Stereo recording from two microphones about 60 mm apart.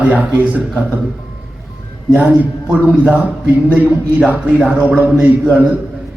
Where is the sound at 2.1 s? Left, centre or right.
Right.